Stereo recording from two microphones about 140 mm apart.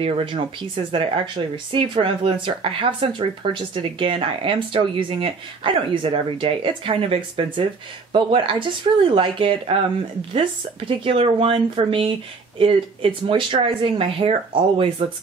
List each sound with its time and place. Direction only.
0.0 s speech: 35° right (ahead or behind)
11.1 s speech: 40° right (ahead or behind)